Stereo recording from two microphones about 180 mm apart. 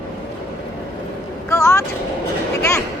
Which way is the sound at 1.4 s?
15° left (ahead or behind).